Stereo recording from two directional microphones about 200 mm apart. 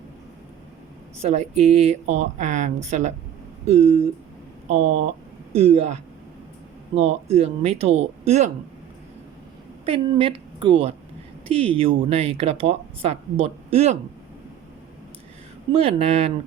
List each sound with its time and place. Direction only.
1.2 s speech: 35° right (ahead or behind)
9.8 s a woman's voice: 25° right (ahead or behind)
15.7 s speech: 30° right (ahead or behind)